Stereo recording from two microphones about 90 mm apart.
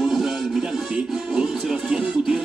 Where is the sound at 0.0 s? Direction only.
5° right (ahead or behind).